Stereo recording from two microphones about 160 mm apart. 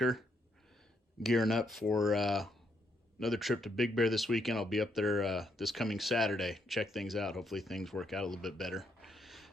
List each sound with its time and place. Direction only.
0.0 s speech: centre (ahead or behind)